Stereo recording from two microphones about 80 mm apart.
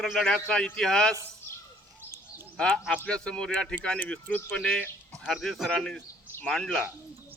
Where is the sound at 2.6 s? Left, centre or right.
Centre.